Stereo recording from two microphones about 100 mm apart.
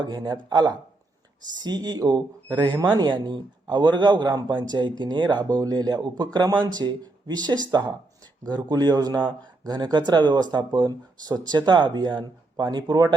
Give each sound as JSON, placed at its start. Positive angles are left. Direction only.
{"t": 0.0, "sound": "speech", "side_deg": -45}